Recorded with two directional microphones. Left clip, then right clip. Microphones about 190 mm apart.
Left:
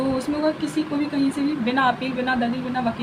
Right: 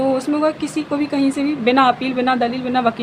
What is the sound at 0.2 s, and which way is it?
A woman's voice, 40° right (ahead or behind).